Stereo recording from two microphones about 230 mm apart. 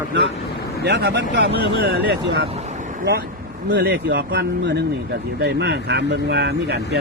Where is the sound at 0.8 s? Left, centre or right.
Right.